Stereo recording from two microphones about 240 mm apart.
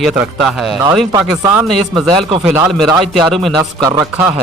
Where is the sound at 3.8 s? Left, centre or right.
Centre.